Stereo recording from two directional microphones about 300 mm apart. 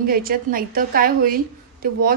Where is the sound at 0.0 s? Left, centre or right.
Right.